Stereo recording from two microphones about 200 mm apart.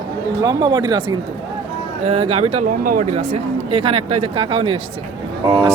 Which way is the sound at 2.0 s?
30° right (ahead or behind).